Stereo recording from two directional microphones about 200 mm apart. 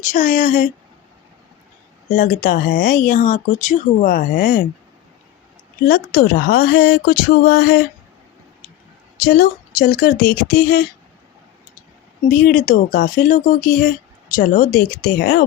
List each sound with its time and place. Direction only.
0.0 s speech: 40° left (ahead or behind)
2.0 s speech: 45° left (ahead or behind)
5.9 s speech: 50° left (ahead or behind)
9.2 s speech: 45° left (ahead or behind)
12.3 s speech: 50° left (ahead or behind)